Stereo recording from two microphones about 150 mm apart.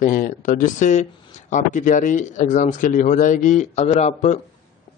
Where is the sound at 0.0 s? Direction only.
65° left (ahead or behind); by 4.4 s 50° left (ahead or behind).